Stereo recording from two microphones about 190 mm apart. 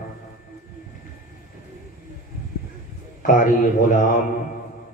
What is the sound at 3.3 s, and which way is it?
Speech, 45° left (ahead or behind).